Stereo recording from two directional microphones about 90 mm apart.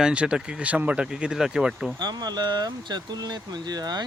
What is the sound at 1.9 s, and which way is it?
Speech, 50° right (ahead or behind).